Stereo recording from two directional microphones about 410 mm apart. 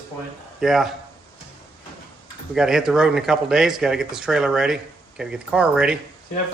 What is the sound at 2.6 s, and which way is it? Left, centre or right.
Speech, centre.